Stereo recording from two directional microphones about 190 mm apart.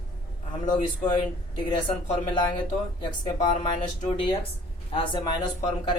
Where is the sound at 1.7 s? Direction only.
25° left (ahead or behind).